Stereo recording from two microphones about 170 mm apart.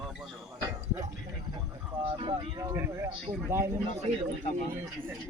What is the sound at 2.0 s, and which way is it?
Speech, 30° right (ahead or behind).